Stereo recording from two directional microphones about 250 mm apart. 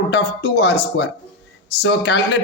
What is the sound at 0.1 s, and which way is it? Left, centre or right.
A man's voice, left.